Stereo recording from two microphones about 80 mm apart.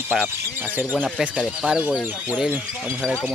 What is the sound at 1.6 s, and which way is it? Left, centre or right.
Speech, centre.